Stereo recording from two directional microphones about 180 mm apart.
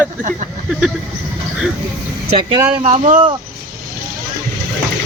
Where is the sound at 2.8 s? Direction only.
40° right (ahead or behind).